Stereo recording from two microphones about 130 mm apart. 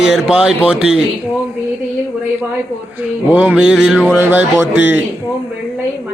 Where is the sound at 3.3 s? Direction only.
10° right (ahead or behind).